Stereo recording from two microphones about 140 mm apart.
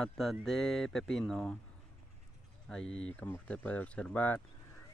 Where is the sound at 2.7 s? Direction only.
5° left (ahead or behind).